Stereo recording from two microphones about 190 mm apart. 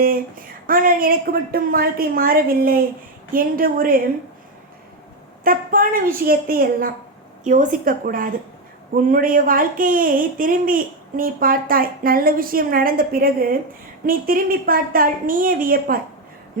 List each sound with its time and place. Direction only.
0.0 s speech: 50° right (ahead or behind)
5.4 s speech: 50° right (ahead or behind)